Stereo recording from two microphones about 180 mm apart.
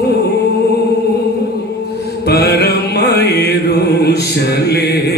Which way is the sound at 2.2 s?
65° left (ahead or behind).